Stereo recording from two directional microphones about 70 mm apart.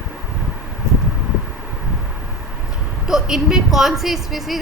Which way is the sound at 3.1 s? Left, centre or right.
Centre.